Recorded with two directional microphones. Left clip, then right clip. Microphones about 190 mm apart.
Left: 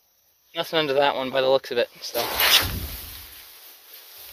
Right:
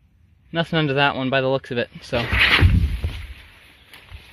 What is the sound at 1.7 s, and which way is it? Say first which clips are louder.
Speech: left 1 dB; 5° left (ahead or behind).